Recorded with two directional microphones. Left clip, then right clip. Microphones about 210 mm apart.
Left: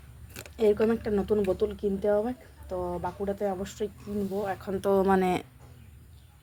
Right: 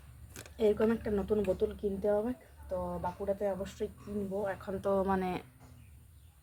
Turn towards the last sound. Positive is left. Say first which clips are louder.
# left 8 dB
turn(degrees=30)  # may be behind; listen again after turning